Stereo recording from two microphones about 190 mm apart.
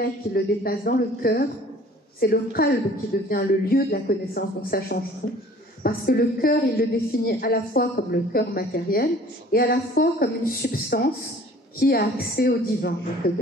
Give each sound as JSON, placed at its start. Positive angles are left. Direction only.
{"t": 0.3, "sound": "a woman's voice", "side_deg": 50}